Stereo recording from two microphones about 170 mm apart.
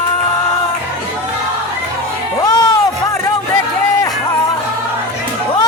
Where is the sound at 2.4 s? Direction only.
25° left (ahead or behind).